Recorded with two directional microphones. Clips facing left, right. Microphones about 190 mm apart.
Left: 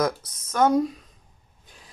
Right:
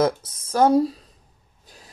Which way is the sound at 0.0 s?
30° right (ahead or behind).